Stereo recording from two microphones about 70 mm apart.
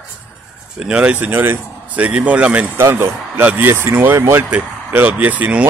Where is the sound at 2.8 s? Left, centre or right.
Right.